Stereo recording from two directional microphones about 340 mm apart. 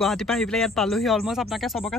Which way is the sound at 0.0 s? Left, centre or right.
Centre.